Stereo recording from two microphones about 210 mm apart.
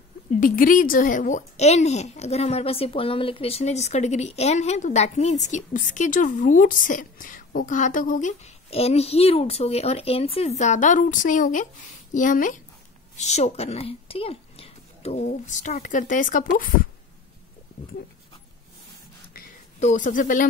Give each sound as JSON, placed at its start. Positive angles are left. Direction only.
{"t": 0.3, "sound": "a woman's voice", "side_deg": 40}
{"t": 19.8, "sound": "a woman's voice", "side_deg": 35}